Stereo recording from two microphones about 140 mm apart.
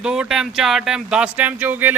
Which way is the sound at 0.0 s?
5° right (ahead or behind).